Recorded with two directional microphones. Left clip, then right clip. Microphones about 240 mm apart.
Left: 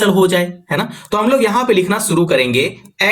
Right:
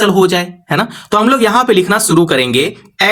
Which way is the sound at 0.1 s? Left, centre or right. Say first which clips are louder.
Right 2 dB; right.